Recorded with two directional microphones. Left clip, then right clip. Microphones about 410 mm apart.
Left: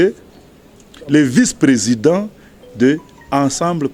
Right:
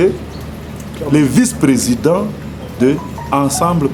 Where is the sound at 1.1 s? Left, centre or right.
Left.